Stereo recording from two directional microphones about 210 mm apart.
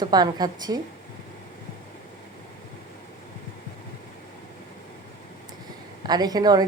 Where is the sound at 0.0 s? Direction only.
20° right (ahead or behind).